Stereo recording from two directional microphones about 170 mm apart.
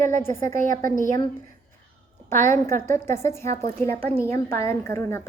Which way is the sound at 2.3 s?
45° right (ahead or behind).